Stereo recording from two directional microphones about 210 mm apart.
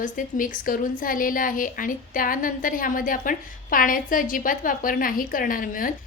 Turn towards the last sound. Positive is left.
turn(degrees=40)  # may be behind; listen again after turning